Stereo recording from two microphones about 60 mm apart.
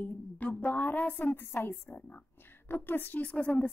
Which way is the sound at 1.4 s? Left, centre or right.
Left.